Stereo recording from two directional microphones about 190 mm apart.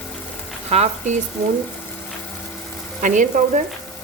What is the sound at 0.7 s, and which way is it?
Speech, 35° right (ahead or behind).